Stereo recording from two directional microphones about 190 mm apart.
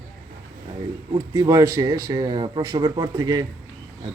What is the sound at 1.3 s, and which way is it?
Speech, 20° right (ahead or behind).